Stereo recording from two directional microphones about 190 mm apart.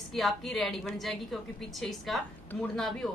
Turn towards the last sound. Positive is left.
turn(degrees=0)  # may be behind; listen again after turning